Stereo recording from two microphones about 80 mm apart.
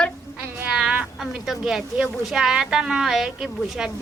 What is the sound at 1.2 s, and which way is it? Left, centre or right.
Speech, centre.